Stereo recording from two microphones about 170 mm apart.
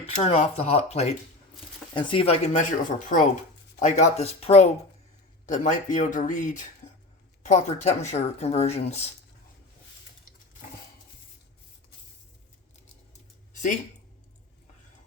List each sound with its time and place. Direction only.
0.0 s speech: 40° left (ahead or behind)
1.9 s speech: 30° left (ahead or behind)
3.8 s speech: 45° left (ahead or behind)
13.5 s a sound: 50° left (ahead or behind)